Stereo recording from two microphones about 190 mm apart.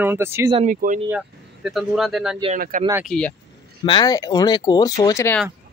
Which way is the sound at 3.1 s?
5° left (ahead or behind).